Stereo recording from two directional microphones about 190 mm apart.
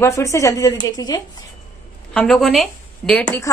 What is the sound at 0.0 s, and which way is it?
A woman's voice, 15° left (ahead or behind).